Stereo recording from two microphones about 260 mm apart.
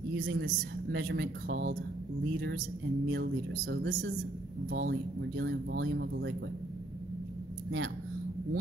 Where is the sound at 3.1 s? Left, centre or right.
Right.